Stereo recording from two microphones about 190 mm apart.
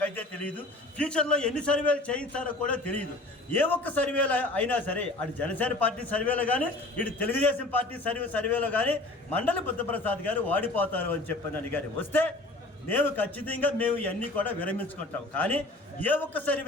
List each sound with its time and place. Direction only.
0.0 s a man's voice: 10° left (ahead or behind)